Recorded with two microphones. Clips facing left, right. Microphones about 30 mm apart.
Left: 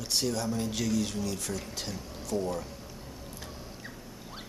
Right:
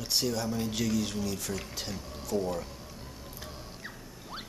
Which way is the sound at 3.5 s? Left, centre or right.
Centre.